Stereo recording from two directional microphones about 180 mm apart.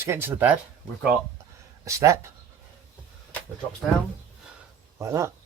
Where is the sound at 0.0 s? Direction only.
10° right (ahead or behind).